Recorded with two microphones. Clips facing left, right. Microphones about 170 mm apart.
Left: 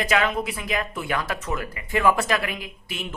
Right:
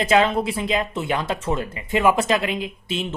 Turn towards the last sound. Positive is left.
turn(degrees=-25)  # may be behind; listen again after turning